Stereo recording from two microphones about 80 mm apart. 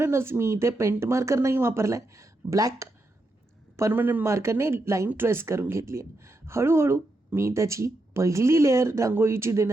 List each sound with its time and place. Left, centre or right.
0.0 s speech: right
3.9 s speech: right